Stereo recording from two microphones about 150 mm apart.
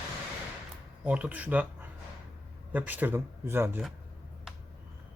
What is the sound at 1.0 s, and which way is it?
Speech, 10° right (ahead or behind).